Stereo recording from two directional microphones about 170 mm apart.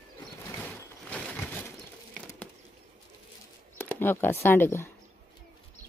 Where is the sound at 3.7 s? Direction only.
10° left (ahead or behind).